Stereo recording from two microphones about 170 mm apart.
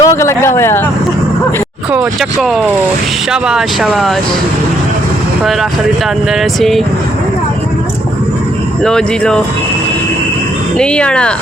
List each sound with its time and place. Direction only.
0.0 s speech: 15° left (ahead or behind)
1.9 s speech: 5° right (ahead or behind)
6.4 s speech: centre (ahead or behind)
8.8 s speech: 5° left (ahead or behind)
10.8 s speech: 5° left (ahead or behind)